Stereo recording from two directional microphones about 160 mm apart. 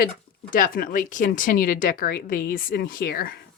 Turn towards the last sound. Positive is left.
turn(degrees=70)  # may be behind; listen again after turning